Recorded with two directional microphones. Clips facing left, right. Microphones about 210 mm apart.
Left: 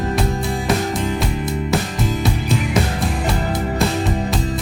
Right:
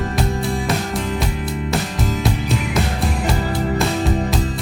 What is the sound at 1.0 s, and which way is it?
Music, centre (ahead or behind).